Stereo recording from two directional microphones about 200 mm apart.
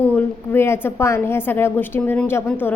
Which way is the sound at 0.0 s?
10° left (ahead or behind).